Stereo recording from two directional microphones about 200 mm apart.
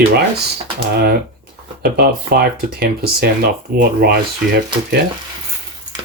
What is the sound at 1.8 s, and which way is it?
Speech, 50° right (ahead or behind).